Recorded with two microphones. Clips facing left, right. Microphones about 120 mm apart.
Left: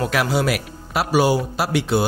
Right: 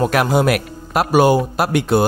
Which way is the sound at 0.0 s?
50° right (ahead or behind).